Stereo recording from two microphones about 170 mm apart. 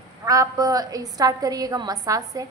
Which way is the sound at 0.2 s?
20° right (ahead or behind).